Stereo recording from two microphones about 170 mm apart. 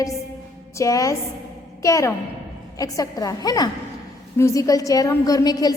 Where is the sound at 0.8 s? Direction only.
20° left (ahead or behind).